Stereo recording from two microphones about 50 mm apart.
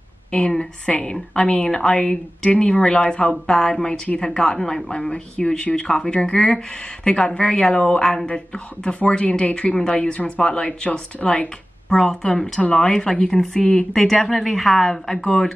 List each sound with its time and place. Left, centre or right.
0.3 s speech: centre